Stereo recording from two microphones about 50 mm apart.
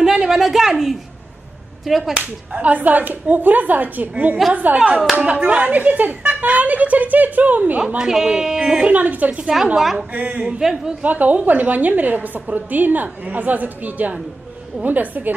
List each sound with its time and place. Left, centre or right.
0.0 s a sound: centre
1.9 s whip: centre
2.1 s a woman's voice: right
8.0 s speech: centre
8.9 s a woman's voice: right
10.6 s speech: centre
11.0 s a woman's voice: right